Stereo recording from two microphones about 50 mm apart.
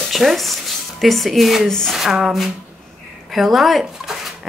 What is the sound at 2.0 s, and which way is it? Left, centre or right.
Speech, centre.